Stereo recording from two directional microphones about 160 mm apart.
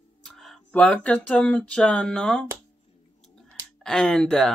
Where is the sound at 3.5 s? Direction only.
5° left (ahead or behind).